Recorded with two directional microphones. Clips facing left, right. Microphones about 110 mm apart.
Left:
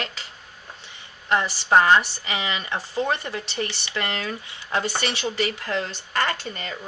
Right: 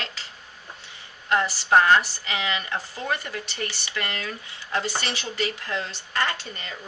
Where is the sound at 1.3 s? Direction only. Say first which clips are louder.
Left 1 dB; 20° left (ahead or behind).